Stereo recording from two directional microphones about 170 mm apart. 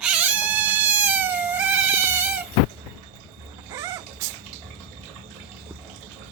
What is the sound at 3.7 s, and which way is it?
Music, 20° right (ahead or behind).